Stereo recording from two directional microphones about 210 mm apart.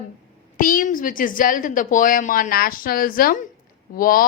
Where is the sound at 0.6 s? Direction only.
40° left (ahead or behind).